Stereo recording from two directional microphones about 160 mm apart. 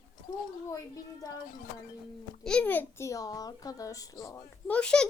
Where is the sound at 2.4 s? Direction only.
10° left (ahead or behind).